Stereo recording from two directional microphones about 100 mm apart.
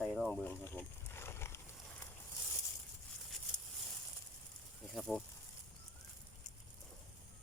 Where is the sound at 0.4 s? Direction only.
25° left (ahead or behind).